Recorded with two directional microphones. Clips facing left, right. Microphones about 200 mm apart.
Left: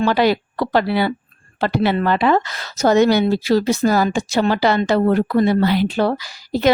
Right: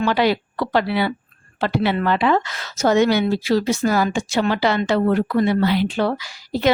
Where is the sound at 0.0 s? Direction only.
40° left (ahead or behind).